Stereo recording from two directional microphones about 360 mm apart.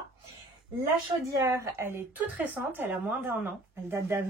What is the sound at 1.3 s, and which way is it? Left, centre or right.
A woman's voice, centre.